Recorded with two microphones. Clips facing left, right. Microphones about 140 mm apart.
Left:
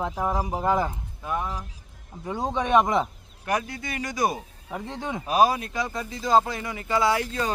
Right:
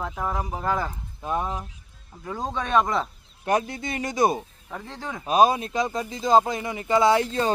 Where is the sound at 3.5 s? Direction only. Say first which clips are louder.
Right 4 dB; 25° right (ahead or behind).